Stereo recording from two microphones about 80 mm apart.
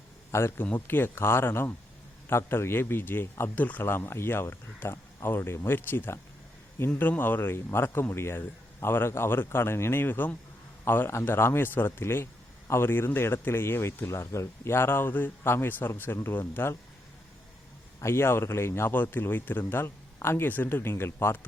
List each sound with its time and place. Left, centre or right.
0.3 s speech: left
18.0 s speech: left